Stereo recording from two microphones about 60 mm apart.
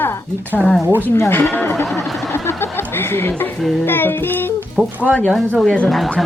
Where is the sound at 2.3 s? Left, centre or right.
Left.